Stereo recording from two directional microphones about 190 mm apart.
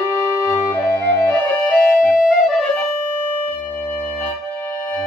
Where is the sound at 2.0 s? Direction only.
50° left (ahead or behind).